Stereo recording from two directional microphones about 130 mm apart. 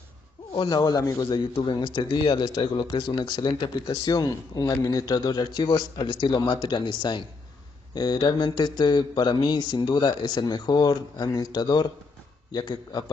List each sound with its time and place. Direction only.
0.6 s speech: 30° left (ahead or behind)